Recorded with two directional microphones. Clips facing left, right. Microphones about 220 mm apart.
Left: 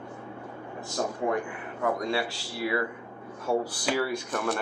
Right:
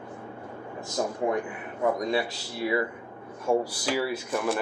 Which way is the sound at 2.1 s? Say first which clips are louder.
Right 2 dB; 20° right (ahead or behind).